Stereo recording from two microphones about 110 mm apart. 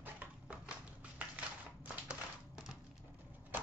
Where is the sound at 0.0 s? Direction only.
15° right (ahead or behind).